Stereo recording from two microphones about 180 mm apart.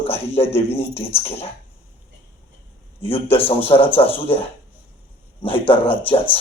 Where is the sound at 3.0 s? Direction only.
30° left (ahead or behind).